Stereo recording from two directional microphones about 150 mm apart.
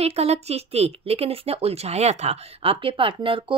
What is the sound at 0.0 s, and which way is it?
Speech, 45° right (ahead or behind).